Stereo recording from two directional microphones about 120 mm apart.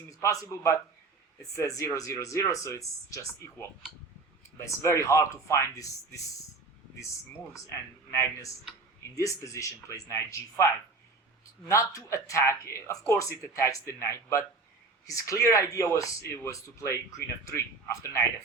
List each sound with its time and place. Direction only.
0.1 s speech: 30° left (ahead or behind)
8.1 s speech: 25° left (ahead or behind)
11.7 s speech: 25° left (ahead or behind)